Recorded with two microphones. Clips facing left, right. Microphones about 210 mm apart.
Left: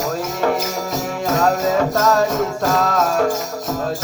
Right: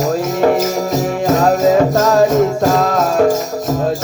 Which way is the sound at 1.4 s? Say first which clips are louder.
Right 5 dB; 20° right (ahead or behind).